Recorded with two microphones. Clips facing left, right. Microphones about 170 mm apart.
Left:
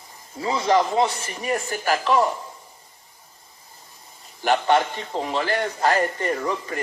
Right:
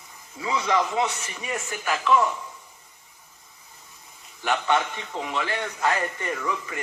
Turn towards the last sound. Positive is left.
turn(degrees=35)  # may be behind; listen again after turning